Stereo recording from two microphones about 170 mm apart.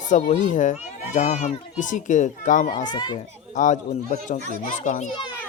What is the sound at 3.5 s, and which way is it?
Speech, 50° left (ahead or behind).